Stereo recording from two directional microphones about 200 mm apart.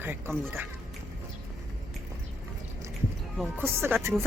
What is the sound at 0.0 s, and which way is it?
Speech, 10° right (ahead or behind).